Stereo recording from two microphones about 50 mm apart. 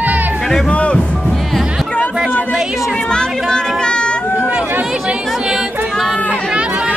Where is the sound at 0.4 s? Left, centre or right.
Centre.